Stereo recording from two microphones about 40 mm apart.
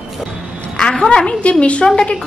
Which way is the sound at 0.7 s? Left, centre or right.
Centre.